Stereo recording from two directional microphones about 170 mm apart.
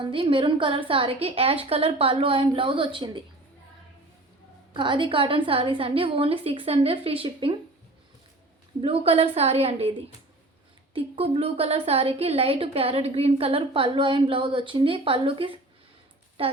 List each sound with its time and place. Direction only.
0.0 s a woman's voice: 30° right (ahead or behind)
4.7 s a woman's voice: 30° right (ahead or behind)
8.8 s a woman's voice: 35° right (ahead or behind)
10.9 s a woman's voice: 35° right (ahead or behind)